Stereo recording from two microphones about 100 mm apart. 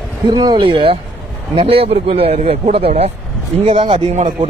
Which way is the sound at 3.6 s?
75° right (ahead or behind).